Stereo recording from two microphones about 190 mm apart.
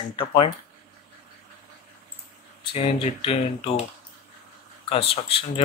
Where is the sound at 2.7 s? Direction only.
30° left (ahead or behind).